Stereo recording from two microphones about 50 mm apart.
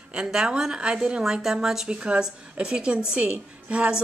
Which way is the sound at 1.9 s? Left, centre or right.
Right.